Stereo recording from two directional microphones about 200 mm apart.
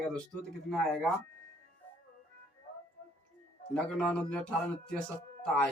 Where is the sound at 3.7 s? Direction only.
5° left (ahead or behind).